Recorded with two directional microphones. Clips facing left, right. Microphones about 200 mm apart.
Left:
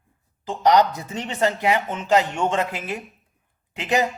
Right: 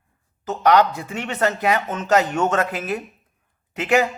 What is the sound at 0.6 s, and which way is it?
Speech, 20° left (ahead or behind).